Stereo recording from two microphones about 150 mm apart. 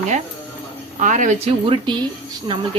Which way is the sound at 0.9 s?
60° right (ahead or behind).